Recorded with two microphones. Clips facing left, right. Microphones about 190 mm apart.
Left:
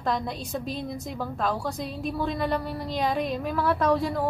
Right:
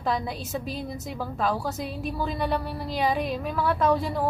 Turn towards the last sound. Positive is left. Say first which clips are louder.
# even
turn(degrees=0)  # may be behind; listen again after turning